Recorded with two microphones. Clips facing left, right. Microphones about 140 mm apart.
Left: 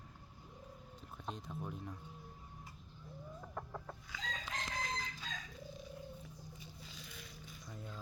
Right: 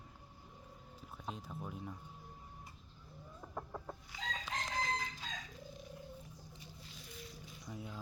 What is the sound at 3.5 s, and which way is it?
Chicken, 10° right (ahead or behind).